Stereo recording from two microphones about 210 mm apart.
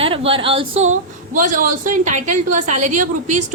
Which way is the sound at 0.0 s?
25° right (ahead or behind).